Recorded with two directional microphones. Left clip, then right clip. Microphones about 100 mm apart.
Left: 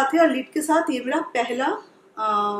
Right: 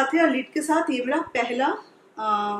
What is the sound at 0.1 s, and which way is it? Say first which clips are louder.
A woman's voice: left 2 dB; 15° left (ahead or behind).